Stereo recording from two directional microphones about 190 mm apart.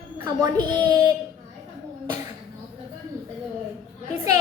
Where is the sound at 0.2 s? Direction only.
20° right (ahead or behind).